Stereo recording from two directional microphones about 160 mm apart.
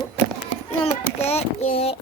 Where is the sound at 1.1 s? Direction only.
40° left (ahead or behind).